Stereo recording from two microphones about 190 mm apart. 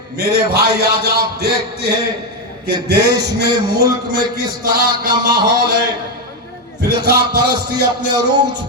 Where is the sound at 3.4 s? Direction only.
20° right (ahead or behind).